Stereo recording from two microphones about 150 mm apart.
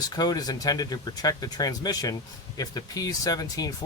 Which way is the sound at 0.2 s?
25° left (ahead or behind).